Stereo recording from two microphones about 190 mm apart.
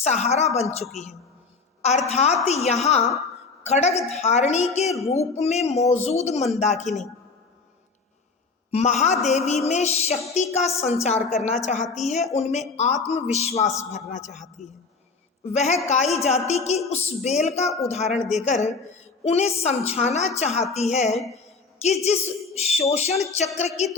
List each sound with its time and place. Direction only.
0.0 s a woman's voice: 35° left (ahead or behind)
2.0 s a woman's voice: 35° left (ahead or behind)
8.7 s a woman's voice: 35° left (ahead or behind)